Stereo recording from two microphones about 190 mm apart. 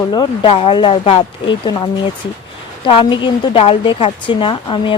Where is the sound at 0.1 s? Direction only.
25° left (ahead or behind).